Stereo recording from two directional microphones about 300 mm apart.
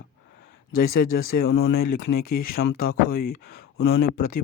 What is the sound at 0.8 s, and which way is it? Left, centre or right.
Speech, left.